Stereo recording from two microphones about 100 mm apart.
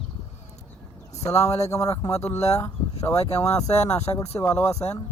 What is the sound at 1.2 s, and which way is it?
Speech, 35° left (ahead or behind).